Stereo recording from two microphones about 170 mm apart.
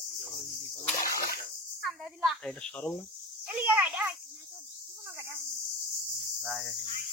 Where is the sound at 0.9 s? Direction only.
60° left (ahead or behind).